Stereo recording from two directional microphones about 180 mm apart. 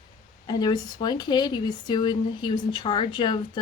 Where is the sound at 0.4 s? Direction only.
25° left (ahead or behind).